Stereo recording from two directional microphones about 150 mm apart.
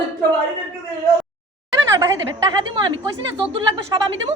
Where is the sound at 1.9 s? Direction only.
25° right (ahead or behind).